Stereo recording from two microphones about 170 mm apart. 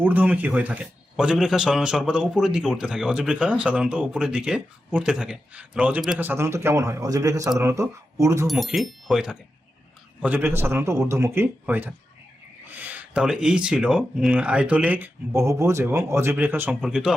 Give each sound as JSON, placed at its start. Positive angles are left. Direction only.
{"t": 0.0, "sound": "a man's voice", "side_deg": -10}
{"t": 8.4, "sound": "a man's voice", "side_deg": 0}